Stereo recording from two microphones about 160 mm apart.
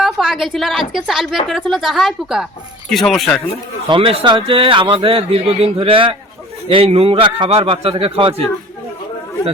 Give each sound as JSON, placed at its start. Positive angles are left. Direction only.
{"t": 0.0, "sound": "a woman's voice", "side_deg": 0}
{"t": 3.8, "sound": "speech", "side_deg": -35}